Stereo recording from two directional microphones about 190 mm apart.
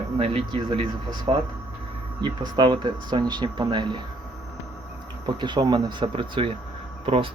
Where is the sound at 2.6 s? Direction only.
25° right (ahead or behind).